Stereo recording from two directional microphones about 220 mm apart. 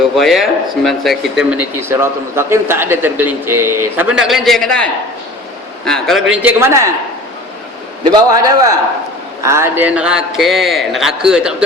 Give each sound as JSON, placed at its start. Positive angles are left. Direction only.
{"t": 0.2, "sound": "a man's voice", "side_deg": 0}
{"t": 8.0, "sound": "a man's voice", "side_deg": -20}